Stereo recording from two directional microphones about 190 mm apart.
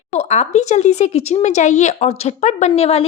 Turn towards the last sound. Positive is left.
turn(degrees=35)  # may be behind; listen again after turning